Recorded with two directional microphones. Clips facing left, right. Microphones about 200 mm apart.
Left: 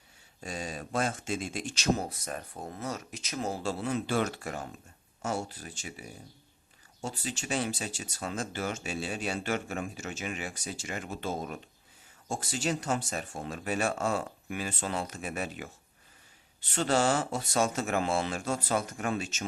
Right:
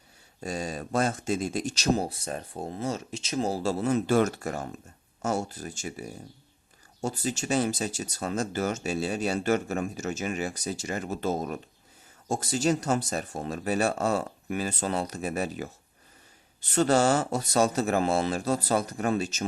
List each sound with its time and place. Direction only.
0.4 s speech: 40° right (ahead or behind)